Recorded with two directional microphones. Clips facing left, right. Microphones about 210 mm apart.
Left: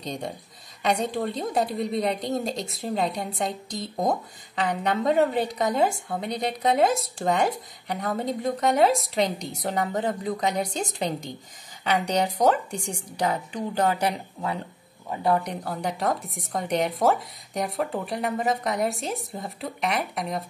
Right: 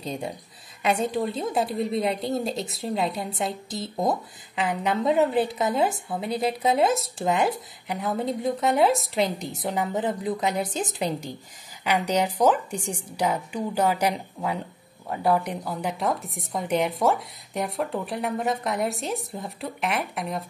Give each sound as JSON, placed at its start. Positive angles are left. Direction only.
{"t": 0.0, "sound": "a woman's voice", "side_deg": -5}
{"t": 15.4, "sound": "a woman's voice", "side_deg": 0}